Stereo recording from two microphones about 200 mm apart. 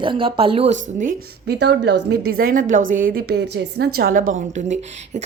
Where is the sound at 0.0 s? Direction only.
25° right (ahead or behind).